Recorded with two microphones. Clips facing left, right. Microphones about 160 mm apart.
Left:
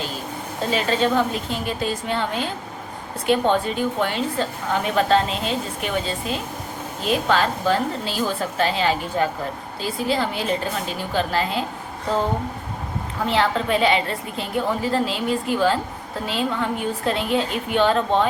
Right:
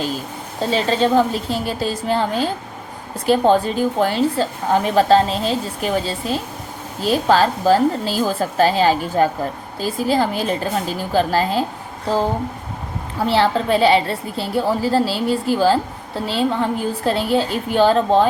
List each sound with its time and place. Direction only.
0.7 s a woman's voice: 30° right (ahead or behind)
13.2 s a woman's voice: 35° right (ahead or behind)